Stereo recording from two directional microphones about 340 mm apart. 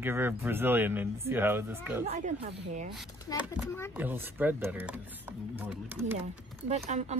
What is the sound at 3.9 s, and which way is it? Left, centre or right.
Speech, centre.